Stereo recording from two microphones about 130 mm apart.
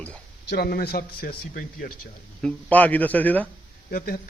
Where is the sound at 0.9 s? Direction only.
90° left.